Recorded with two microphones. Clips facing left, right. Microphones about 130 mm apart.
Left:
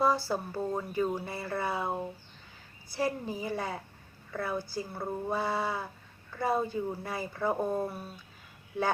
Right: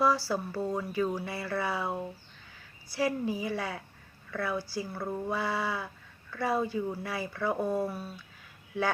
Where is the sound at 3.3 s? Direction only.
45° left (ahead or behind).